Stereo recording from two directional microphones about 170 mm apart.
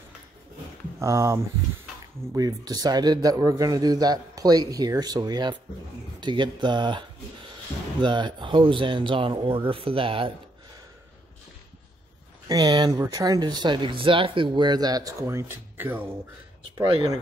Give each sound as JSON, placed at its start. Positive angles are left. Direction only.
{"t": 0.9, "sound": "speech", "side_deg": -15}
{"t": 12.4, "sound": "speech", "side_deg": -25}
{"t": 16.7, "sound": "speech", "side_deg": -25}